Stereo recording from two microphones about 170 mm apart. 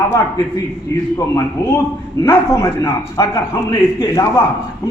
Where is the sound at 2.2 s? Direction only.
15° left (ahead or behind).